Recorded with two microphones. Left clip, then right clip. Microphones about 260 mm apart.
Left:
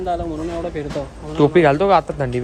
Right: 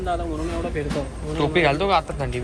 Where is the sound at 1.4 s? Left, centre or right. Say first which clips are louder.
Left 6 dB; left.